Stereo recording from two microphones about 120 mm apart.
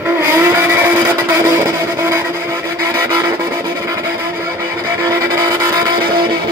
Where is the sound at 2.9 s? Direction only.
25° right (ahead or behind).